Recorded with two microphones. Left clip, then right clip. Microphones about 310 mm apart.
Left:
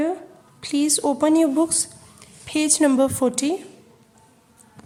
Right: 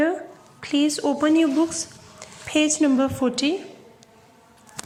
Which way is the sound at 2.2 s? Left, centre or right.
Centre.